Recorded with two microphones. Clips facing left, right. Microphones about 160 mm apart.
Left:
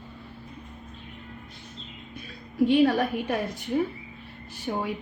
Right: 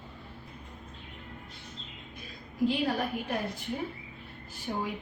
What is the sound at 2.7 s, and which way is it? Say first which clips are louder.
Speech: left 10 dB; 75° left (ahead or behind).